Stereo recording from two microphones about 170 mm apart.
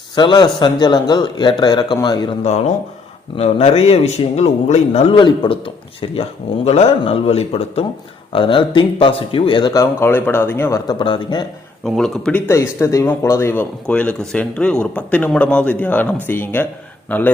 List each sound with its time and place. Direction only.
0.2 s speech: 25° left (ahead or behind)
2.4 s a man's voice: 40° left (ahead or behind); by 10.8 s 10° left (ahead or behind)
10.8 s speech: 25° left (ahead or behind)
11.9 s speech: 5° left (ahead or behind)
12.5 s speech: 15° left (ahead or behind)